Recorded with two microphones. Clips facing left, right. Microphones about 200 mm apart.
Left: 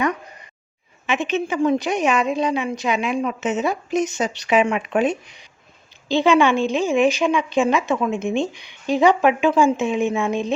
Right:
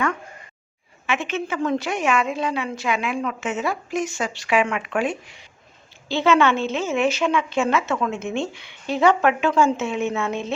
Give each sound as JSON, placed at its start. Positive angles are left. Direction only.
{"t": 1.0, "sound": "a woman's voice", "side_deg": 20}